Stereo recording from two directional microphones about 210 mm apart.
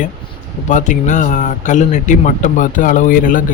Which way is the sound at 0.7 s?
35° left (ahead or behind).